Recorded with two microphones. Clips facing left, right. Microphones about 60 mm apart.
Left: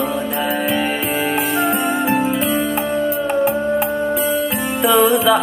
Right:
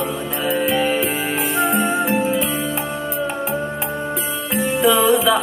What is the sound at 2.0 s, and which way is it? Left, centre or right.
Music, left.